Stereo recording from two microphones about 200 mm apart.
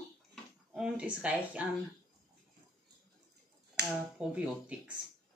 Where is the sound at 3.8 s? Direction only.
55° right (ahead or behind).